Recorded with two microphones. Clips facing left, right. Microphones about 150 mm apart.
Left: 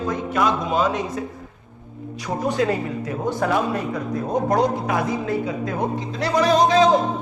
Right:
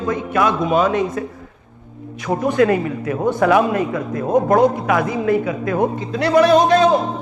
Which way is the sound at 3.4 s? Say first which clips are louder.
Right 7 dB; 80° right.